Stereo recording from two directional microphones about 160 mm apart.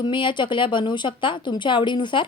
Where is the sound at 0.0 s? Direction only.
30° left (ahead or behind).